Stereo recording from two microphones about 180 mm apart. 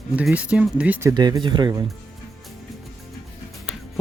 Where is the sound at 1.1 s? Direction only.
25° right (ahead or behind).